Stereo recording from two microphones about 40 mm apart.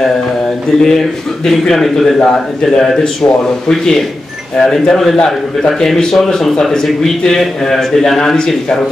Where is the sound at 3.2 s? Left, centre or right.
Left.